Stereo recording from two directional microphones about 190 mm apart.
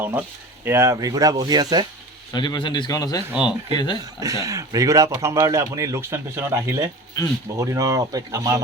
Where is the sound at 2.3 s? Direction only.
25° left (ahead or behind).